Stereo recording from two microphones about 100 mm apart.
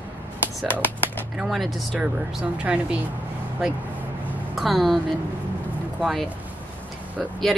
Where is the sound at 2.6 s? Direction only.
10° right (ahead or behind).